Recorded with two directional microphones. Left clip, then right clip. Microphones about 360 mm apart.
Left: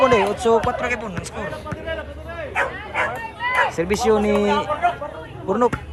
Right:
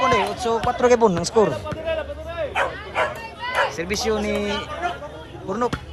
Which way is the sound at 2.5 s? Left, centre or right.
Centre.